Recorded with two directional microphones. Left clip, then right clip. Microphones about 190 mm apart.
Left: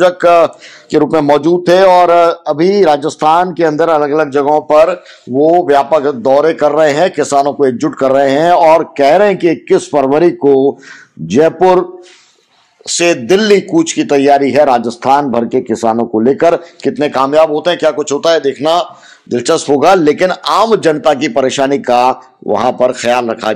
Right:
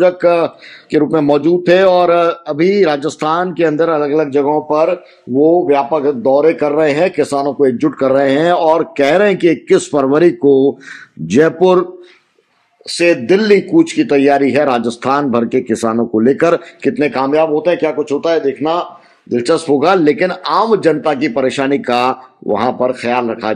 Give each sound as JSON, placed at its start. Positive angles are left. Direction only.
{"t": 0.0, "sound": "a man's voice", "side_deg": 10}
{"t": 12.8, "sound": "speech", "side_deg": 15}
{"t": 15.4, "sound": "speech", "side_deg": -15}
{"t": 16.8, "sound": "a man's voice", "side_deg": 0}
{"t": 17.1, "sound": "speech", "side_deg": 15}
{"t": 19.2, "sound": "speech", "side_deg": 15}